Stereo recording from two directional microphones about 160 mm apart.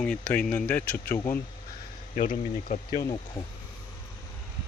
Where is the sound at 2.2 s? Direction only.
55° left (ahead or behind).